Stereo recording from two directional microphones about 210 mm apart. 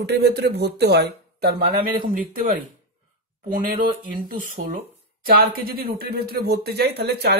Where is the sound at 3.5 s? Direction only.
40° right (ahead or behind).